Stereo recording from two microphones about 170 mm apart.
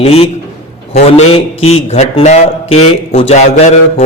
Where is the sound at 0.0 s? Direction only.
35° left (ahead or behind).